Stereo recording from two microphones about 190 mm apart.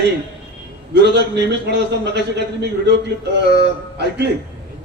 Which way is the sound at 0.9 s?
65° right (ahead or behind).